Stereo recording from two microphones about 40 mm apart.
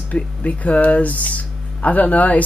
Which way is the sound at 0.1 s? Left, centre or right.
Left.